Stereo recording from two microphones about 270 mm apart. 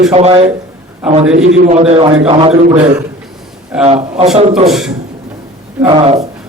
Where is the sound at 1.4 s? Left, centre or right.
Right.